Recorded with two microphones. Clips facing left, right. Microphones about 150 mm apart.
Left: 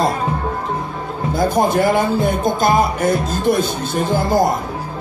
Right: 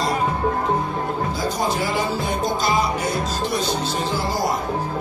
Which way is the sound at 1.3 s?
55° left (ahead or behind).